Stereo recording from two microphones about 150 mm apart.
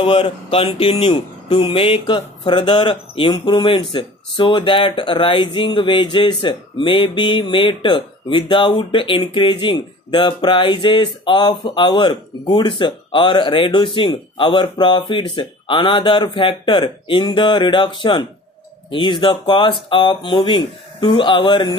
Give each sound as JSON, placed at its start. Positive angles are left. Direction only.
{"t": 0.0, "sound": "speech", "side_deg": 35}